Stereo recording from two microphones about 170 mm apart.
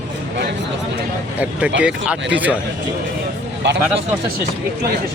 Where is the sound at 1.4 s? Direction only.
5° right (ahead or behind).